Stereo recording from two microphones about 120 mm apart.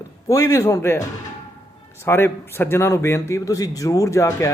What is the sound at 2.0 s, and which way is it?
A man's voice, 20° left (ahead or behind).